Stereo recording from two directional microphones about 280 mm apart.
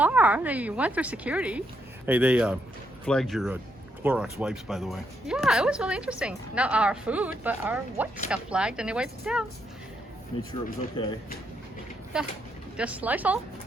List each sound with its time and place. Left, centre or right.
0.0 s speech: centre
11.0 s speech: centre
12.7 s speech: centre